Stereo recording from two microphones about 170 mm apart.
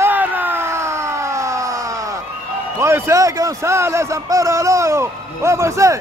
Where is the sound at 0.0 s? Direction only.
10° right (ahead or behind).